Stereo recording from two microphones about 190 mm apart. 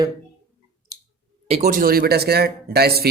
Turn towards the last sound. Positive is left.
turn(degrees=-55)  # may be behind; listen again after turning